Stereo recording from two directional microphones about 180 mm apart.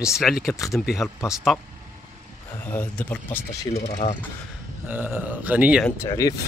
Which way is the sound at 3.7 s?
35° left (ahead or behind).